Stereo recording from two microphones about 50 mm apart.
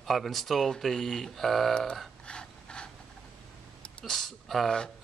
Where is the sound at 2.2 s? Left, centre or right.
Centre.